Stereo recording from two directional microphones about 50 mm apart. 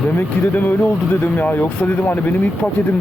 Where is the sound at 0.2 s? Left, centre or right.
Left.